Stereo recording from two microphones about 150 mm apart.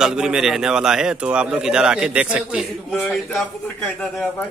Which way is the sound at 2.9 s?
10° left (ahead or behind).